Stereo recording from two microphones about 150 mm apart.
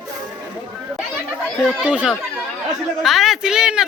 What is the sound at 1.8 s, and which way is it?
A woman's voice, 10° right (ahead or behind).